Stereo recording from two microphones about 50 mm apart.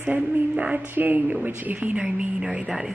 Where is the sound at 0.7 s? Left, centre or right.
Right.